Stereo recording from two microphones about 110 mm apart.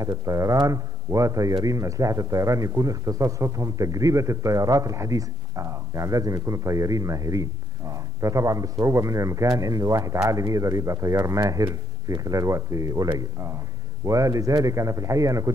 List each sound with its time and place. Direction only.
0.0 s a man's voice: 30° right (ahead or behind)